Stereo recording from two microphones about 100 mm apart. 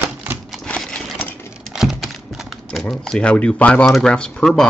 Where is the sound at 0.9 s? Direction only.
15° left (ahead or behind).